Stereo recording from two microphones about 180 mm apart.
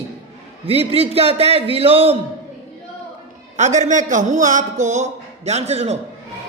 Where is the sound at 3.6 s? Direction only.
40° right (ahead or behind).